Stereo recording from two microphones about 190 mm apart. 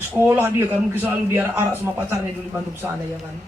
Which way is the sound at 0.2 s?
10° right (ahead or behind).